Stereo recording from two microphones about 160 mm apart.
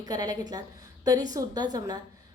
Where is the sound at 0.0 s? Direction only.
25° right (ahead or behind).